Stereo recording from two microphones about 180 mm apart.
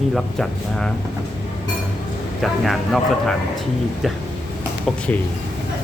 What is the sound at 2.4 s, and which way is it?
Speech, centre (ahead or behind).